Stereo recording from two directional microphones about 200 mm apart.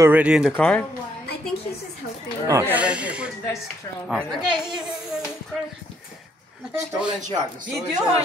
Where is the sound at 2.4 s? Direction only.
15° right (ahead or behind).